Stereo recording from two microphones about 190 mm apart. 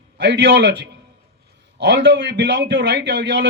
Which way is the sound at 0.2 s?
65° right (ahead or behind).